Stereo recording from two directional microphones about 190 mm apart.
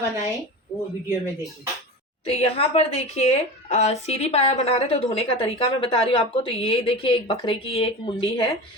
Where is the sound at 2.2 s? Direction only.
30° left (ahead or behind).